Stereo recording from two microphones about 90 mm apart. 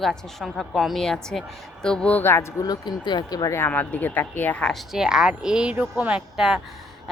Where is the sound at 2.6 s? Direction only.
50° left (ahead or behind).